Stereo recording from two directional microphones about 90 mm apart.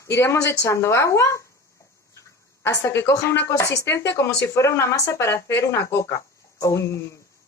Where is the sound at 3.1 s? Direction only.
30° left (ahead or behind).